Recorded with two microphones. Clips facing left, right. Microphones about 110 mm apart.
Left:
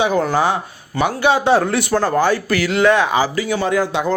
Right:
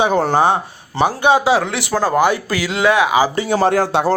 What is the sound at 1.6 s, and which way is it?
Speech, 90° right.